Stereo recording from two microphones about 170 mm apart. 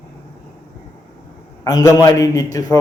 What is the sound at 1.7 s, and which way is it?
Speech, 20° left (ahead or behind).